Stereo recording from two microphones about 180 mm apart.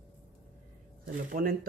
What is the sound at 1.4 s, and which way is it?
Speech, 50° right (ahead or behind).